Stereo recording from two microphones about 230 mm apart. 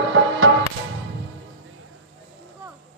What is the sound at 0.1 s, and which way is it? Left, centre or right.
Music, right.